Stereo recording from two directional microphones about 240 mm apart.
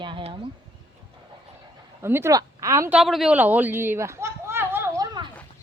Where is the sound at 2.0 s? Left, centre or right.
Centre.